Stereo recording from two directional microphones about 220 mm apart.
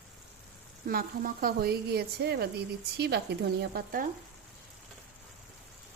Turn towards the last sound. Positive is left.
turn(degrees=-45)  # may be behind; listen again after turning